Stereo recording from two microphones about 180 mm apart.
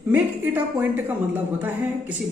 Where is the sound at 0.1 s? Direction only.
10° right (ahead or behind).